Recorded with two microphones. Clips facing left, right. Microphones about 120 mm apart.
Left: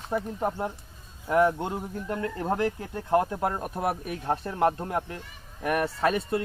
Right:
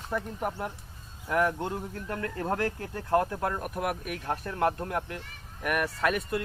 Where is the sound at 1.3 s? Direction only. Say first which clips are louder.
Left 4 dB; 20° left (ahead or behind).